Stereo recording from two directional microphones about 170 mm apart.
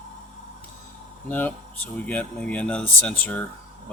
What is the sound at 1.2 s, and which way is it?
Speech, 10° left (ahead or behind).